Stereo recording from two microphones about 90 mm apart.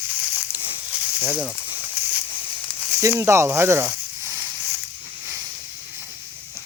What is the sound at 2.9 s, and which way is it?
Speech, 30° right (ahead or behind).